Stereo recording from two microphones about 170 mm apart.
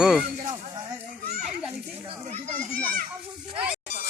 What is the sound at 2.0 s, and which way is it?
Children playing, 40° right (ahead or behind).